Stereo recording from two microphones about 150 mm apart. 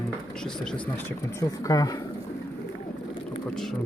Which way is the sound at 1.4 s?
25° left (ahead or behind).